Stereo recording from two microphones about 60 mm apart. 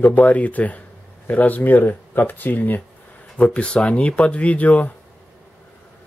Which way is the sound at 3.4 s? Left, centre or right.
Centre.